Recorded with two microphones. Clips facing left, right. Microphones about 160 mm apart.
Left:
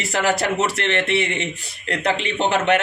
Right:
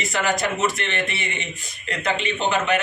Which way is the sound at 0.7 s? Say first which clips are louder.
Left 7 dB; 85° left.